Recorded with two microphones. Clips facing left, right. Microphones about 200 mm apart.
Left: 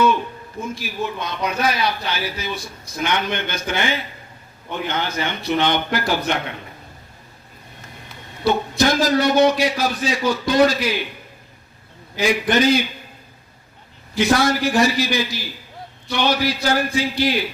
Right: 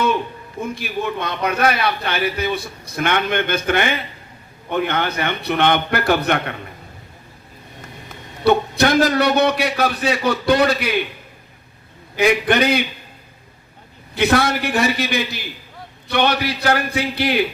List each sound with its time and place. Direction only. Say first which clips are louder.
0.8 s a man's voice: right 4 dB; 60° right (ahead or behind)
8.4 s a man's voice: right 3 dB; 60° right (ahead or behind)
12.1 s a man's voice: right 2 dB; 60° right (ahead or behind)
14.2 s a man's voice: even; 60° right (ahead or behind)